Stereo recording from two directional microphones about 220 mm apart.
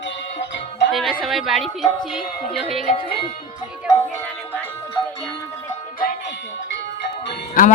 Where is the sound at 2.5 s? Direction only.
Centre (ahead or behind).